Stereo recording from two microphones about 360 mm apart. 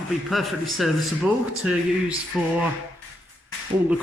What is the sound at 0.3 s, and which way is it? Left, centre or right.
Speech, centre.